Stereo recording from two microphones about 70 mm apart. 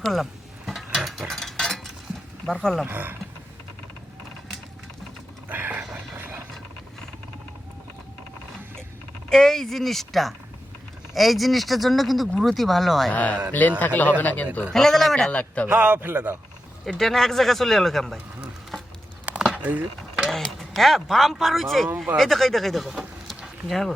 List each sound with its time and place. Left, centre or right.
0.0 s speech: centre
0.9 s ratchet: centre
2.5 s speech: centre
2.8 s a man's voice: right
5.5 s a sound: right
6.1 s mechanisms: right
9.3 s speech: centre
13.1 s speech: left
14.7 s speech: centre
15.3 s speech: centre
15.7 s a man's voice: right
17.0 s speech: centre
19.2 s a sound: centre
20.3 s speech: centre